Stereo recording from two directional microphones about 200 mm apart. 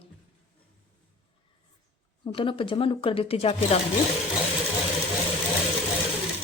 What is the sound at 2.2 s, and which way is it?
Speech, 25° left (ahead or behind).